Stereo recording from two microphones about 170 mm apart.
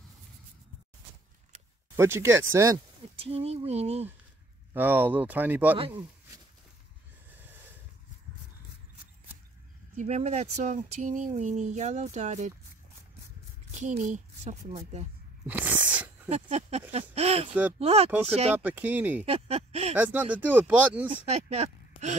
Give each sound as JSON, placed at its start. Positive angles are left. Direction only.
{"t": 2.0, "sound": "speech", "side_deg": -15}
{"t": 3.2, "sound": "a woman's voice", "side_deg": -35}
{"t": 4.7, "sound": "speech", "side_deg": -10}
{"t": 9.9, "sound": "speech", "side_deg": -40}
{"t": 13.7, "sound": "a woman's voice", "side_deg": -40}
{"t": 15.4, "sound": "a sound", "side_deg": -10}
{"t": 16.3, "sound": "a woman's voice", "side_deg": -40}
{"t": 17.5, "sound": "speech", "side_deg": -10}
{"t": 17.7, "sound": "a woman's voice", "side_deg": -35}
{"t": 18.6, "sound": "speech", "side_deg": -10}
{"t": 19.2, "sound": "a woman's voice", "side_deg": -35}
{"t": 20.0, "sound": "speech", "side_deg": -10}
{"t": 21.1, "sound": "speech", "side_deg": -40}